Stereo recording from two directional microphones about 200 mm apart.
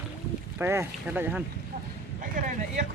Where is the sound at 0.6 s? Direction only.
10° right (ahead or behind).